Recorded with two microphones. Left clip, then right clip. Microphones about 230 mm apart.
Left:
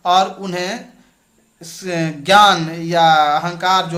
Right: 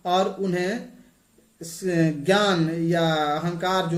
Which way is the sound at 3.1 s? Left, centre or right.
Left.